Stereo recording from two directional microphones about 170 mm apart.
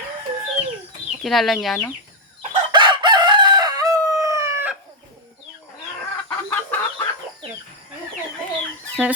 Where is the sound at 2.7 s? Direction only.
30° right (ahead or behind).